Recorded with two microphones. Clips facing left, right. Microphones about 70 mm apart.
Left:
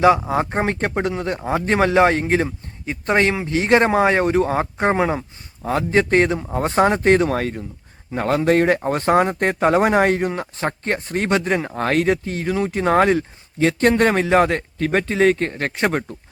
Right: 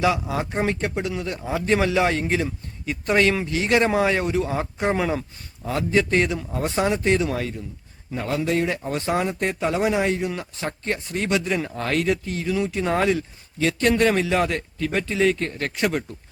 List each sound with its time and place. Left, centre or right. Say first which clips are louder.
0.0 s speech: left 7 dB; left